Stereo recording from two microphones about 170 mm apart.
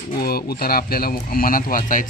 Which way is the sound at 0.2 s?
65° left (ahead or behind).